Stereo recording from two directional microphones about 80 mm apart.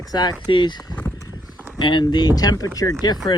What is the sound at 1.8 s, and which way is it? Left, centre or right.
Speech, left.